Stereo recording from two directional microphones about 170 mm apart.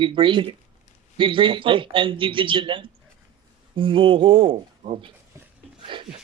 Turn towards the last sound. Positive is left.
turn(degrees=-30)  # may be behind; listen again after turning